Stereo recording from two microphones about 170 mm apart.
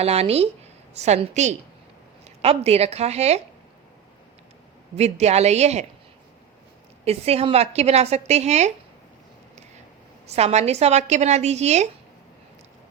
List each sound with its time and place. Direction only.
0.0 s a woman's voice: 35° right (ahead or behind)
4.9 s a woman's voice: 40° right (ahead or behind)
7.0 s a woman's voice: 35° right (ahead or behind)
10.3 s a woman's voice: 40° right (ahead or behind)